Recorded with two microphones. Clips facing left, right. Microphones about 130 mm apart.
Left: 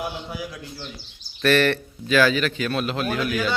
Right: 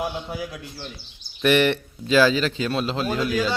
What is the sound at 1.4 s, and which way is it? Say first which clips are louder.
A man's voice: even; 20° right (ahead or behind).